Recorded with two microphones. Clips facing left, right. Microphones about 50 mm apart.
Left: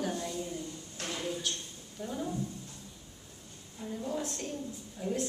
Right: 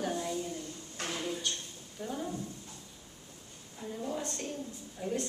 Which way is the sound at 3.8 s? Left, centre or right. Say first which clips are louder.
Left 1 dB; centre.